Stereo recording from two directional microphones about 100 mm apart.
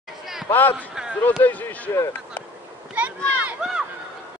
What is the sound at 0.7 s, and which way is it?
Speech, 5° right (ahead or behind).